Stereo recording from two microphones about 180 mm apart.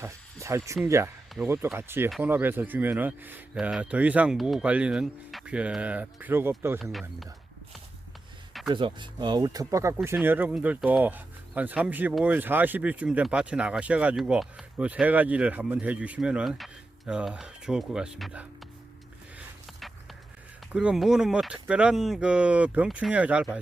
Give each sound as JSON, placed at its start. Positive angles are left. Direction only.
{"t": 0.0, "sound": "speech", "side_deg": -15}
{"t": 8.7, "sound": "speech", "side_deg": -25}
{"t": 20.7, "sound": "speech", "side_deg": -5}